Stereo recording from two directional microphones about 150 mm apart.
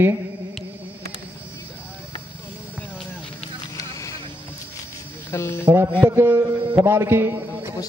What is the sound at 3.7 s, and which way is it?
Vehicle, 20° left (ahead or behind).